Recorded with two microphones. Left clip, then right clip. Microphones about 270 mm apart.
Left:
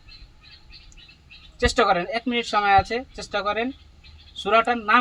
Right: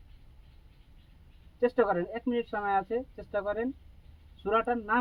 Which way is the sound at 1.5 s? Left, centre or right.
Centre.